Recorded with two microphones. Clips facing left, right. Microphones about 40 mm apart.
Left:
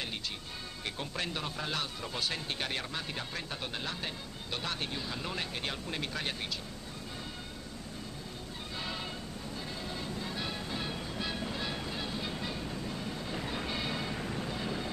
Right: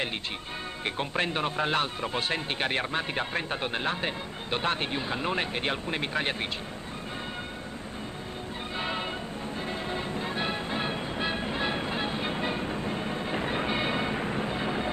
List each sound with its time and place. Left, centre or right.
0.8 s speech: right
8.7 s music: right